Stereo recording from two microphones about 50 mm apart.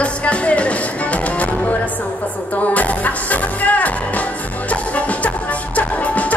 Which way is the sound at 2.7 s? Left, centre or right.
Left.